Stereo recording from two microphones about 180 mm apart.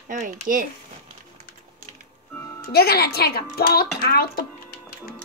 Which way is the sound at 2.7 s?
60° left (ahead or behind).